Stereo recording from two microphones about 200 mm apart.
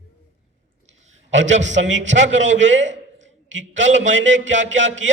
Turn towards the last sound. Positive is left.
turn(degrees=-70)  # may be behind; listen again after turning